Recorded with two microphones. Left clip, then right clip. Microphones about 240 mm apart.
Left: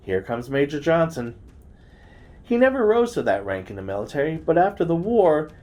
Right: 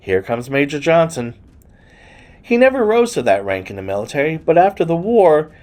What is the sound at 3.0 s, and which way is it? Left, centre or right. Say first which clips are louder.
Speech: right 7 dB; right.